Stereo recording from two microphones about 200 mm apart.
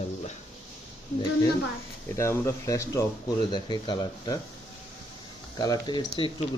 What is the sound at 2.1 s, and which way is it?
Speech, 15° left (ahead or behind).